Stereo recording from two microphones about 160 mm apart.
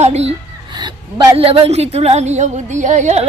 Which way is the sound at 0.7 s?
30° right (ahead or behind).